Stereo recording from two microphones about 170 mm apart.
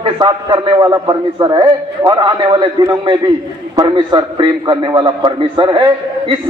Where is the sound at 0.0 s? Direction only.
30° right (ahead or behind).